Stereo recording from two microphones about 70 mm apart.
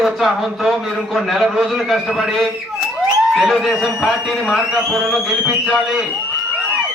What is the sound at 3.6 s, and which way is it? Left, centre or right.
A man's voice, centre.